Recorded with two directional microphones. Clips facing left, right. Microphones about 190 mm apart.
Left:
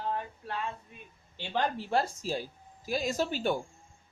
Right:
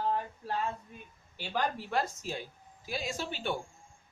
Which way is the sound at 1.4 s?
25° left (ahead or behind).